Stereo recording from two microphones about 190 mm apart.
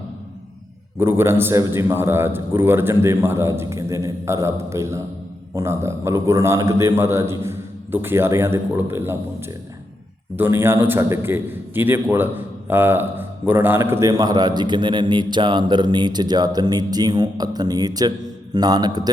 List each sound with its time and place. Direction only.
0.9 s a man's voice: 10° right (ahead or behind)